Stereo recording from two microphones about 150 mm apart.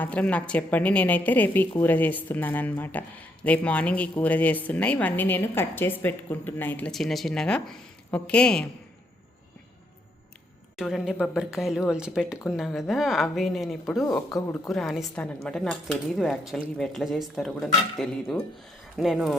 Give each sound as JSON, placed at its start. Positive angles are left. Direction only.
{"t": 0.0, "sound": "a woman's voice", "side_deg": 10}
{"t": 6.9, "sound": "speech", "side_deg": 0}
{"t": 10.8, "sound": "speech", "side_deg": 0}
{"t": 14.3, "sound": "speech", "side_deg": 25}
{"t": 14.7, "sound": "a woman's voice", "side_deg": 0}